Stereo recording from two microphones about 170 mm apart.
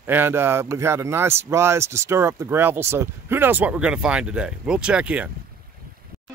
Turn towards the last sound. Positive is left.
turn(degrees=-5)  # may be behind; listen again after turning